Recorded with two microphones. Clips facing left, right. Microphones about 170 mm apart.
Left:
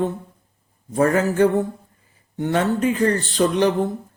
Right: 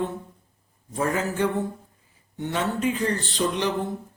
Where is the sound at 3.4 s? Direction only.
75° left (ahead or behind).